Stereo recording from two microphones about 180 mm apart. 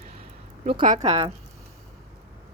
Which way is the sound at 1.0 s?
35° right (ahead or behind).